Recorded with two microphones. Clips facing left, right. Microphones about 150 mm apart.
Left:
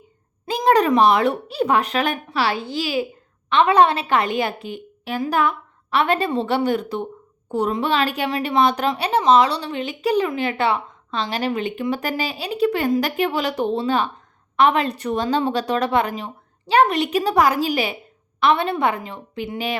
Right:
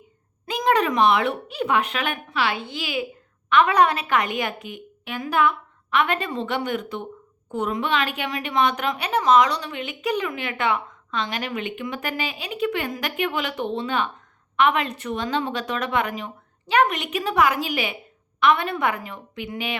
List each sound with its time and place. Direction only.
0.4 s a woman's voice: 35° left (ahead or behind)